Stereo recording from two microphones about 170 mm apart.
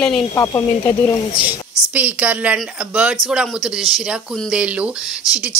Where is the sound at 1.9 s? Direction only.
10° right (ahead or behind).